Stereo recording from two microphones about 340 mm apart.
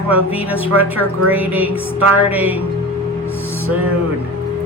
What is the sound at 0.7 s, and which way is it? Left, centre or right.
Speech, right.